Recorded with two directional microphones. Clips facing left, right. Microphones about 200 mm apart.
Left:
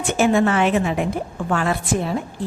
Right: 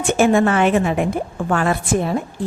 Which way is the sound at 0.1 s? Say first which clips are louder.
Right 2 dB; 50° right (ahead or behind).